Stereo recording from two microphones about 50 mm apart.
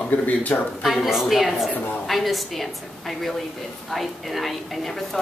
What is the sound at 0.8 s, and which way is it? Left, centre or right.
A woman's voice, centre.